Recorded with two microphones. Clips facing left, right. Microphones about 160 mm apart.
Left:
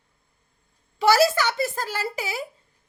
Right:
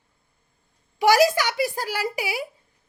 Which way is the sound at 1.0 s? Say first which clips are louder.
Right 1 dB; 15° right (ahead or behind).